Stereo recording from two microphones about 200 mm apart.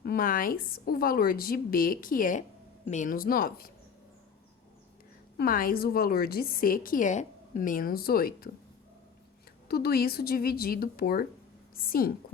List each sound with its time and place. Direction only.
0.0 s a woman's voice: 45° left (ahead or behind)
5.4 s a woman's voice: 45° left (ahead or behind)
9.6 s a woman's voice: 50° left (ahead or behind)